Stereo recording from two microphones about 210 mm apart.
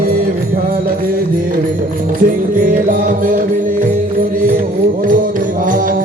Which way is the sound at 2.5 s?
40° right (ahead or behind).